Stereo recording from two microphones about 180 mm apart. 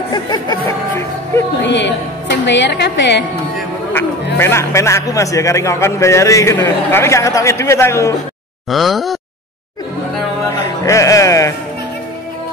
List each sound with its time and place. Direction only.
0.1 s speech: 25° left (ahead or behind)
1.6 s a woman's voice: 75° left (ahead or behind)
4.4 s a man's voice: 15° left (ahead or behind)
8.6 s a sound: centre (ahead or behind)
10.5 s speech: 15° left (ahead or behind)